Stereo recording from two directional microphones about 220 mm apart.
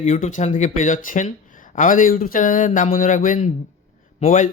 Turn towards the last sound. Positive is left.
turn(degrees=35)  # may be behind; listen again after turning